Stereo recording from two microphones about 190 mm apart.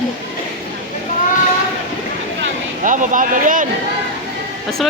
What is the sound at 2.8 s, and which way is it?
Speech, 40° right (ahead or behind).